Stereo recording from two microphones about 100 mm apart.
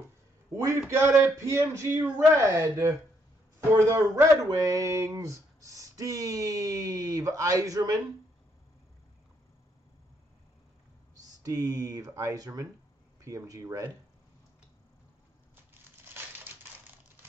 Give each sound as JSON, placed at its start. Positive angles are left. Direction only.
{"t": 0.7, "sound": "speech", "side_deg": -25}
{"t": 11.4, "sound": "speech", "side_deg": -35}